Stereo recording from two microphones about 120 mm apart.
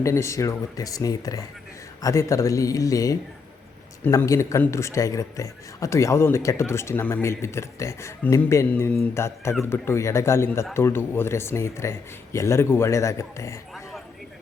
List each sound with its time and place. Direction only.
0.0 s a man's voice: 25° left (ahead or behind)
4.2 s a man's voice: 25° left (ahead or behind)